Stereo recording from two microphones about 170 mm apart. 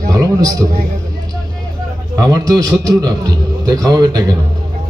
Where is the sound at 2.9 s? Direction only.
20° right (ahead or behind).